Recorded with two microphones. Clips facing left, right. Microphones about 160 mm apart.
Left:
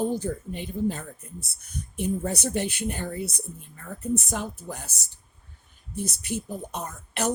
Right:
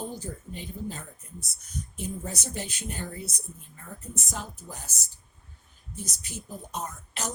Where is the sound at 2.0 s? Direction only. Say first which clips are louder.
Left 9 dB; 65° left (ahead or behind).